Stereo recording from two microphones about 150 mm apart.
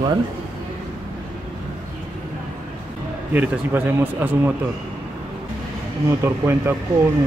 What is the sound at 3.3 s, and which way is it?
Speech, 10° right (ahead or behind).